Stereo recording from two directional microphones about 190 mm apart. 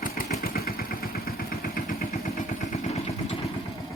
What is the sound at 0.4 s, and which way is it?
Vehicle, 55° left (ahead or behind).